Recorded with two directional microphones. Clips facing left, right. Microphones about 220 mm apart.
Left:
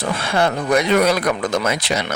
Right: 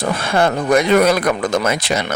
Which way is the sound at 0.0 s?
45° right (ahead or behind).